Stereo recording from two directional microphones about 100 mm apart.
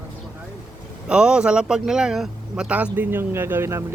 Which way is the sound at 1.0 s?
10° right (ahead or behind).